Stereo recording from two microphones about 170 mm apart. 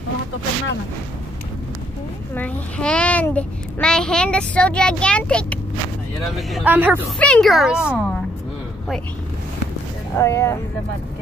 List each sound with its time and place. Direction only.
2.3 s a child's voice: 5° left (ahead or behind); by 7.1 s 10° right (ahead or behind)
7.2 s a child's voice: 5° left (ahead or behind)
10.1 s a child's voice: 15° left (ahead or behind)